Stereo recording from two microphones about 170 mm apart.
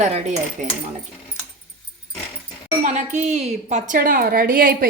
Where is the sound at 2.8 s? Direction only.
45° right (ahead or behind).